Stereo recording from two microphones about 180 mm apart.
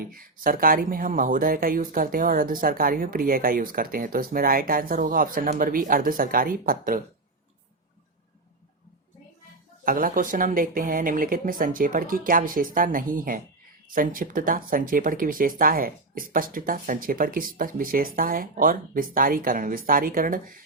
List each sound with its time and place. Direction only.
0.0 s speech: 50° right (ahead or behind)
9.8 s speech: 50° right (ahead or behind)